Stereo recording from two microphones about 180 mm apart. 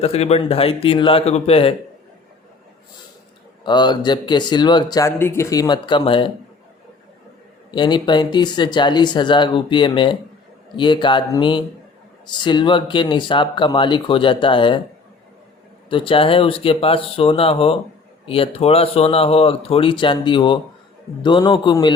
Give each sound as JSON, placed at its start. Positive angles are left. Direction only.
{"t": 0.0, "sound": "speech", "side_deg": 35}
{"t": 3.6, "sound": "speech", "side_deg": 25}
{"t": 7.7, "sound": "speech", "side_deg": 25}
{"t": 15.9, "sound": "speech", "side_deg": 30}